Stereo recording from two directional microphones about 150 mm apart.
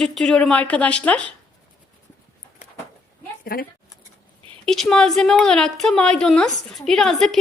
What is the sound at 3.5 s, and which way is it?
Speech, 85° left.